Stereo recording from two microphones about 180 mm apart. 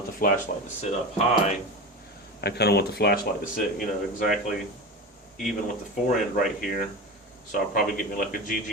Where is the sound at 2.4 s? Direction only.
65° left (ahead or behind).